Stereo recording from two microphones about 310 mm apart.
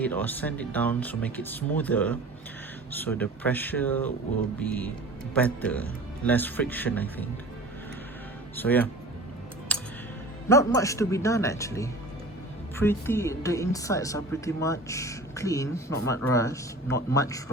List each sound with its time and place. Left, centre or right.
0.0 s speech: centre
8.5 s speech: centre
9.7 s music: centre
10.5 s a woman's voice: centre